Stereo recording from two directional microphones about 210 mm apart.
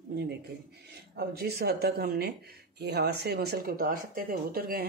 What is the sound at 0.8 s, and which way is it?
Speech, 50° right (ahead or behind).